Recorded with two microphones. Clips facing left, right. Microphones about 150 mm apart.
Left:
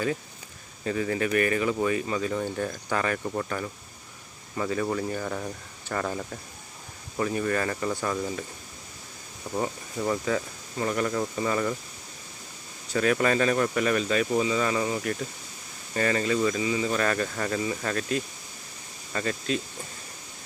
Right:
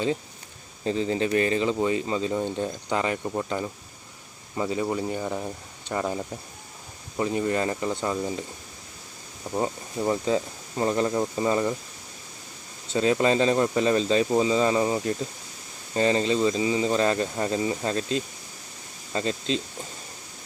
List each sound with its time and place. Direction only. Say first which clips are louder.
0.9 s speech: right 2 dB; 25° right (ahead or behind)
9.6 s speech: right 2 dB; 25° right (ahead or behind)
12.9 s speech: right 2 dB; 25° right (ahead or behind)